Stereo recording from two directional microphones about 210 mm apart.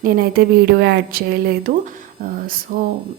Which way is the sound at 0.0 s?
45° right (ahead or behind).